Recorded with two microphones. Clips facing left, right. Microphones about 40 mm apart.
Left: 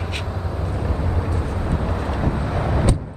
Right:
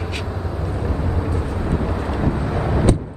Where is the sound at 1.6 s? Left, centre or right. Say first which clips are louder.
Right 3 dB; centre.